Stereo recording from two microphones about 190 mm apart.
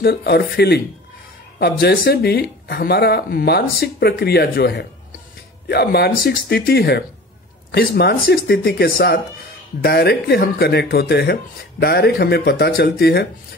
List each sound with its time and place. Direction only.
0.0 s speech: 60° left (ahead or behind)